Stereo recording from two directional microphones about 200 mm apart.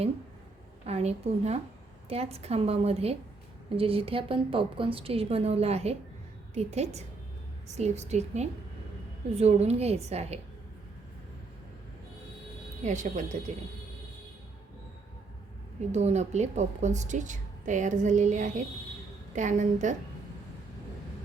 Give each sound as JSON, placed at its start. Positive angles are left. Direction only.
{"t": 0.9, "sound": "a woman's voice", "side_deg": -30}
{"t": 12.8, "sound": "a woman's voice", "side_deg": -35}
{"t": 15.9, "sound": "a woman's voice", "side_deg": -35}